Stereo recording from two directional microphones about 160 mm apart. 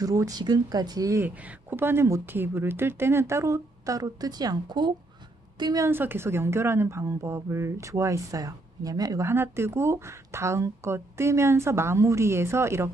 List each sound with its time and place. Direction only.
0.0 s a woman's voice: 20° right (ahead or behind)
5.9 s a woman's voice: 15° right (ahead or behind)